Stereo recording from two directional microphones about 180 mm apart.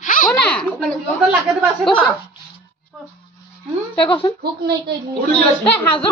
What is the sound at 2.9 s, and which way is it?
Music, centre (ahead or behind).